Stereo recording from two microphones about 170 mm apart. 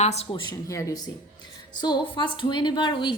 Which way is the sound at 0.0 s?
40° left (ahead or behind).